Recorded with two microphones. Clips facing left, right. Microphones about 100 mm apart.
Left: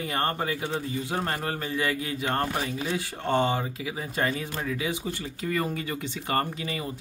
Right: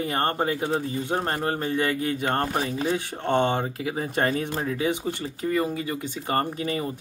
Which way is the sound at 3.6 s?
45° right (ahead or behind).